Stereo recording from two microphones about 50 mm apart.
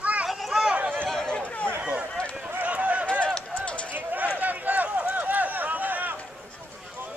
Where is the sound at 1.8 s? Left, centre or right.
Right.